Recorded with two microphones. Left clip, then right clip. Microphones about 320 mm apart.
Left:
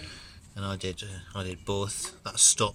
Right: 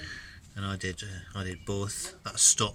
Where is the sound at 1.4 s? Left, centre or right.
Left.